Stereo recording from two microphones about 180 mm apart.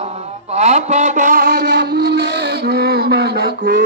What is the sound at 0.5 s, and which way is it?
Mantra, 40° right (ahead or behind).